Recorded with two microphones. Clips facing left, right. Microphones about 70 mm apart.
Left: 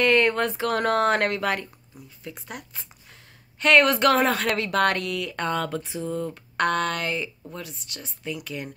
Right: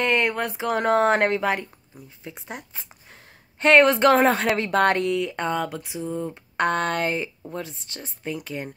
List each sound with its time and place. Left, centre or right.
0.0 s speech: centre; by 8.6 s right